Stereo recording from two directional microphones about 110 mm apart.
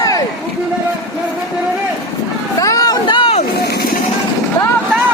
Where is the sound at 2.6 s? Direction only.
35° left (ahead or behind); by 3.4 s 50° left (ahead or behind).